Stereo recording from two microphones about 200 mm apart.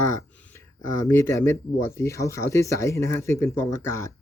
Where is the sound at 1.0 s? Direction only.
10° left (ahead or behind).